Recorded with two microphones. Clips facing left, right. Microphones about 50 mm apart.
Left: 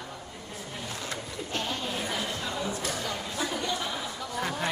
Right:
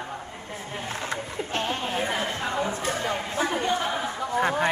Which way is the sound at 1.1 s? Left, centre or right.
Right.